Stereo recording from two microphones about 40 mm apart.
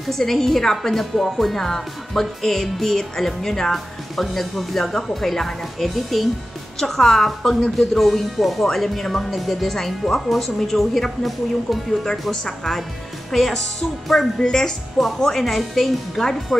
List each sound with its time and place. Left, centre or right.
0.0 s speech: centre
3.7 s speech: centre
6.8 s speech: centre
12.1 s speech: centre
14.4 s speech: centre
15.0 s speech: centre